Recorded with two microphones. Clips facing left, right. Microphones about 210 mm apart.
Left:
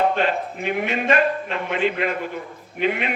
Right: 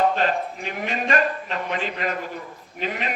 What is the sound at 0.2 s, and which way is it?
A man's voice, 40° right (ahead or behind).